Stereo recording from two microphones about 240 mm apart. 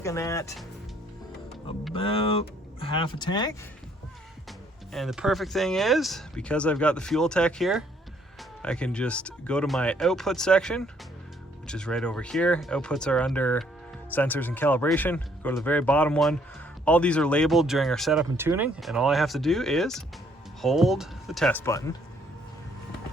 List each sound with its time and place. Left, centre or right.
0.0 s speech: centre
1.9 s speech: left
4.9 s speech: centre